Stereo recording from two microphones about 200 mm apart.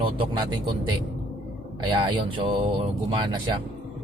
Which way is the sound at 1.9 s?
25° right (ahead or behind).